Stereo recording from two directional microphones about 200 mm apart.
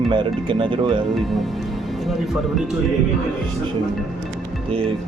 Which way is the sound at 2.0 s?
Centre (ahead or behind).